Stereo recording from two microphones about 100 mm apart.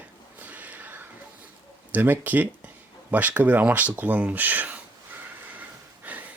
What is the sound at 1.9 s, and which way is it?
Speech, 20° right (ahead or behind).